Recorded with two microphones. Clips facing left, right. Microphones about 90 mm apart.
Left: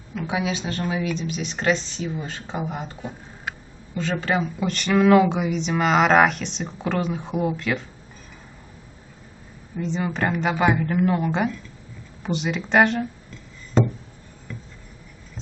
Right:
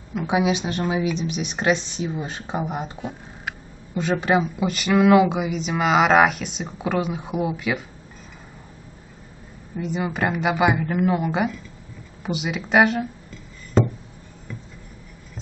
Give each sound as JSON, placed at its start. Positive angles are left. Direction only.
{"t": 0.1, "sound": "a woman's voice", "side_deg": -15}
{"t": 9.8, "sound": "a woman's voice", "side_deg": -10}
{"t": 12.2, "sound": "a sound", "side_deg": -5}